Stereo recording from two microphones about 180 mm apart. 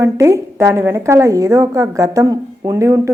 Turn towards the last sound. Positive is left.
turn(degrees=-15)  # may be behind; listen again after turning